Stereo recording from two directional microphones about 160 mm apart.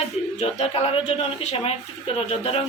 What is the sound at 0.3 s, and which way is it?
A man's voice, 40° left (ahead or behind).